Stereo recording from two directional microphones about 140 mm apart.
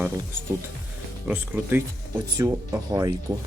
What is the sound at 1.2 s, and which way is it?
Speech, 10° right (ahead or behind).